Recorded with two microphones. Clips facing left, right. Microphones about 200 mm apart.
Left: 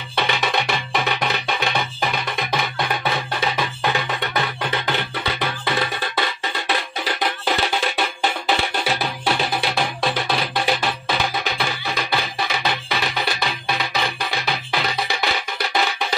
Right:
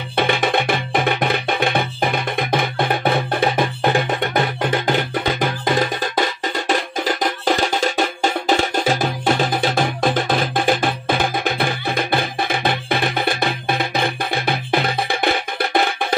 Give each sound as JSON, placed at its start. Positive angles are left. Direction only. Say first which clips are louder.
{"t": 0.1, "sound": "music", "louder": "right 4 dB", "side_deg": -50}